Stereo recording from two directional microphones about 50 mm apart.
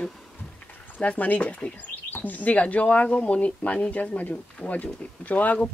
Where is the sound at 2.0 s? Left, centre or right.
Left.